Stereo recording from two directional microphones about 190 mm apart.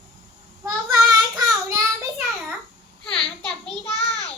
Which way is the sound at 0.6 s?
20° right (ahead or behind).